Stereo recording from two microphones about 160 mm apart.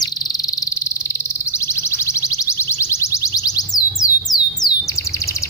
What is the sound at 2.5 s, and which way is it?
Music, 15° left (ahead or behind).